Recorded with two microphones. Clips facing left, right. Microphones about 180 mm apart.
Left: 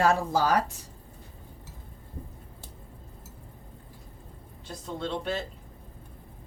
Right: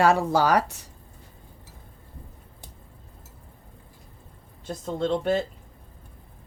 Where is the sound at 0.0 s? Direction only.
75° right (ahead or behind).